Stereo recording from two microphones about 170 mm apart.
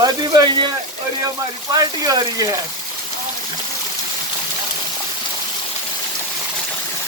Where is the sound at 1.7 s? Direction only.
20° right (ahead or behind).